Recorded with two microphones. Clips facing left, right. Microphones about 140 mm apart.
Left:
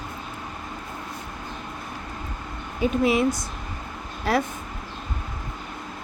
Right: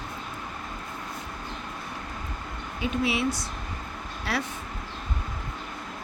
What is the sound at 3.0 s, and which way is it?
A woman's voice, 45° left (ahead or behind).